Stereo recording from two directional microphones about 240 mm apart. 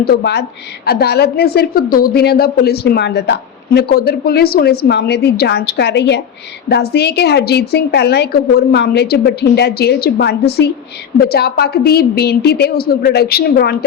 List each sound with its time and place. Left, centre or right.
0.0 s a woman's voice: left